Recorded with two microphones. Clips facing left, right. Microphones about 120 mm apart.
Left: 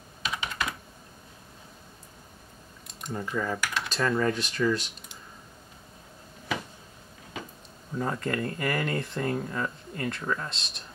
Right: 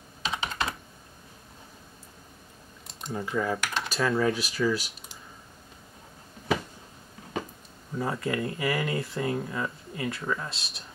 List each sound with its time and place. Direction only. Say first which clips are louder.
0.2 s computer keyboard: right 2 dB; 30° right (ahead or behind)
3.1 s speech: right 2 dB; 5° right (ahead or behind)
3.6 s computer keyboard: even; 25° right (ahead or behind)
3.9 s speech: right 1 dB; 5° right (ahead or behind)
8.0 s speech: even; 5° right (ahead or behind)